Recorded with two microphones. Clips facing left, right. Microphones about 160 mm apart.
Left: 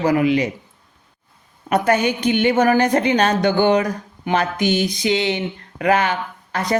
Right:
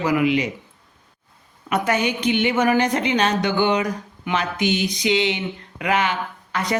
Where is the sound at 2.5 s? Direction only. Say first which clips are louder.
Left 3 dB; 35° left (ahead or behind).